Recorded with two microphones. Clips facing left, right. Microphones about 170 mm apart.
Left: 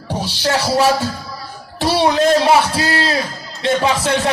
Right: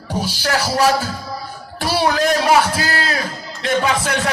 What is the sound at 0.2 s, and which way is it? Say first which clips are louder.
Speech: left 2 dB; 25° left (ahead or behind).